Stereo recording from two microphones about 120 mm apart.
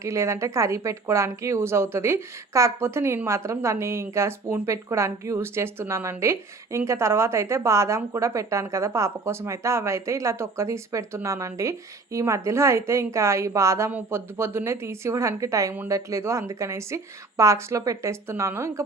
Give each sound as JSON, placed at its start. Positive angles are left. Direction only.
{"t": 0.0, "sound": "a woman's voice", "side_deg": -25}